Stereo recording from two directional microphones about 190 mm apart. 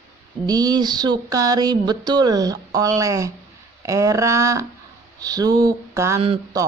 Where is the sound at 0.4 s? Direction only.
20° right (ahead or behind).